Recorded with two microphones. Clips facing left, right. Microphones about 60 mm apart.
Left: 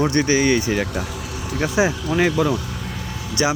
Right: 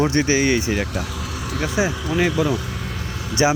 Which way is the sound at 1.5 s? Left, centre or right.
Centre.